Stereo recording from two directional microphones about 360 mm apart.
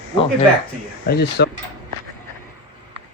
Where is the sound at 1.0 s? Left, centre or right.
Left.